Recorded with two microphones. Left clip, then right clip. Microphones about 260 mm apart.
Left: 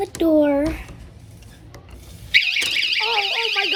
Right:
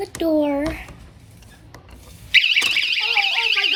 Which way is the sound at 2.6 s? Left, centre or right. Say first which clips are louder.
Right 1 dB; centre.